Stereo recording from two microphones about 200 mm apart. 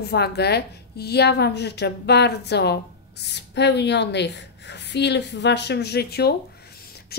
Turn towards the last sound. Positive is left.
turn(degrees=55)  # may be behind; listen again after turning